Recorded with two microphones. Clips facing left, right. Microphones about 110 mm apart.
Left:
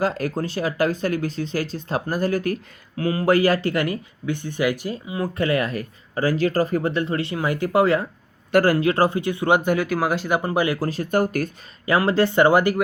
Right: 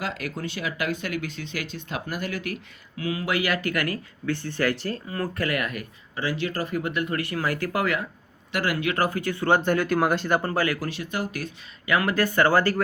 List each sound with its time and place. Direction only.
0.0 s speech: 40° left (ahead or behind); by 10.8 s 20° left (ahead or behind)
10.8 s speech: 40° left (ahead or behind)
11.9 s speech: 30° left (ahead or behind)